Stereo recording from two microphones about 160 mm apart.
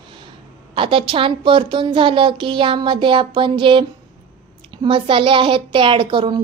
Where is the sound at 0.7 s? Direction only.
35° right (ahead or behind).